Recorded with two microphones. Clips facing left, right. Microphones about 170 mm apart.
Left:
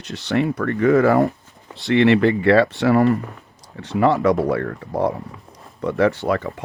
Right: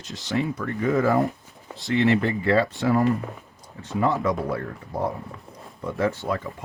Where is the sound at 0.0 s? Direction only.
65° left (ahead or behind).